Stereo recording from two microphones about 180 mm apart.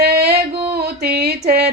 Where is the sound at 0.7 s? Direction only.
65° right (ahead or behind).